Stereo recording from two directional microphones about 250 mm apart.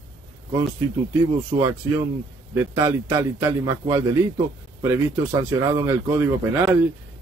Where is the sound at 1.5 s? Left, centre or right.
Centre.